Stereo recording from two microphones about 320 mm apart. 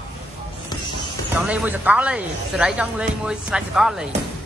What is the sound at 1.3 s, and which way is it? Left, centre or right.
Speech, centre.